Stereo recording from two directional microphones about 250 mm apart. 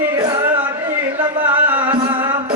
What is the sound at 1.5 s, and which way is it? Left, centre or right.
Music, centre.